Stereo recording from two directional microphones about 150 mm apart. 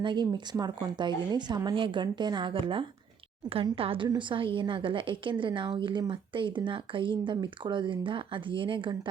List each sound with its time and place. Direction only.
0.0 s a woman's voice: 30° right (ahead or behind)